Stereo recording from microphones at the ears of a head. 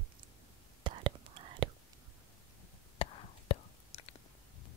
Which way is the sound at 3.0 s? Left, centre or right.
Left.